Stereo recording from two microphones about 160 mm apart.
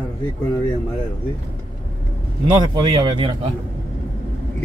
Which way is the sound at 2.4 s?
25° right (ahead or behind).